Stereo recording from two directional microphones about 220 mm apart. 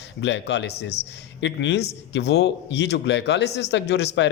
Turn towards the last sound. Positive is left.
turn(degrees=50)  # may be behind; listen again after turning